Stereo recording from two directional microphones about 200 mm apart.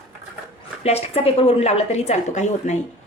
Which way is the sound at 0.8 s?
30° left (ahead or behind).